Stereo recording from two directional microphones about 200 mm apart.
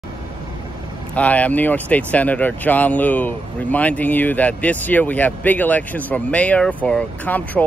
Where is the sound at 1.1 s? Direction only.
5° left (ahead or behind).